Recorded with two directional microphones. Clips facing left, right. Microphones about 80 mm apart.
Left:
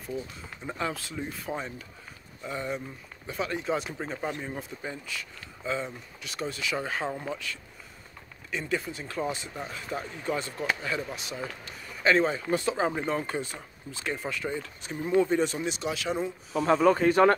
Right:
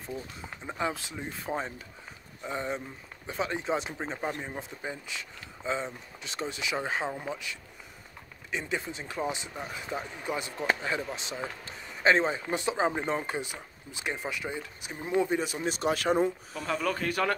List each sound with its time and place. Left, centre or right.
0.7 s speech: centre
15.6 s speech: right
16.5 s speech: left